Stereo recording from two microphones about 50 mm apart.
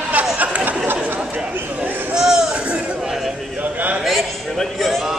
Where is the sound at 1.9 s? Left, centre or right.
Right.